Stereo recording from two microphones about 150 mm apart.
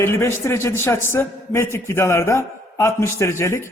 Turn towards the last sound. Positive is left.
turn(degrees=15)  # may be behind; listen again after turning